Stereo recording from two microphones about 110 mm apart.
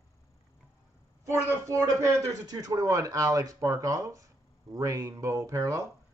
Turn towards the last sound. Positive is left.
turn(degrees=-30)  # may be behind; listen again after turning